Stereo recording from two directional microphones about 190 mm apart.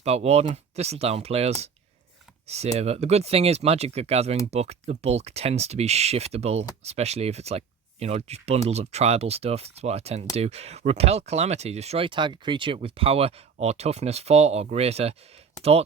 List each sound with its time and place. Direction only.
0.0 s speech: 35° right (ahead or behind)